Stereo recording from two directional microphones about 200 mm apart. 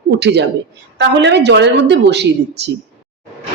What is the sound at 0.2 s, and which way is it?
A woman's voice, 60° right (ahead or behind).